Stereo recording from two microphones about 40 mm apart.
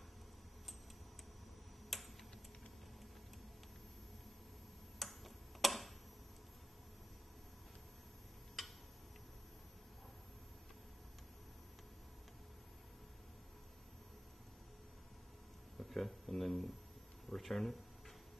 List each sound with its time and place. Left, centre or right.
1.9 s typing: centre
4.9 s tick-tock: centre
15.8 s speech: centre